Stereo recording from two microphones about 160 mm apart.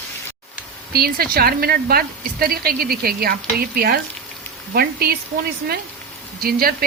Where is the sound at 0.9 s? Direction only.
70° right (ahead or behind).